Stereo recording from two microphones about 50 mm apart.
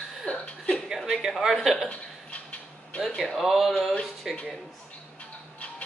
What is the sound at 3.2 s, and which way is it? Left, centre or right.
Speech, centre.